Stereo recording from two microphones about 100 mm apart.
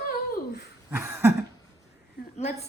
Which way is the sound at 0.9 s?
25° right (ahead or behind).